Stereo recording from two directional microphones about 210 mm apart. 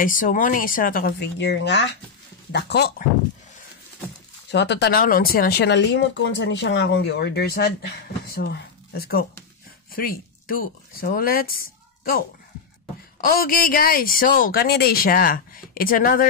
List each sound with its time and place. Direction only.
0.0 s speech: 40° left (ahead or behind)
4.5 s speech: 55° left (ahead or behind)
13.2 s speech: 45° left (ahead or behind)